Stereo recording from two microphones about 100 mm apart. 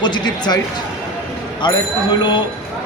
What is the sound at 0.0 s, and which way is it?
Speech, 45° left (ahead or behind).